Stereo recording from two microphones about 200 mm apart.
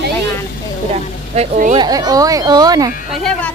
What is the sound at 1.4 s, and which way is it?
Speech, 40° right (ahead or behind).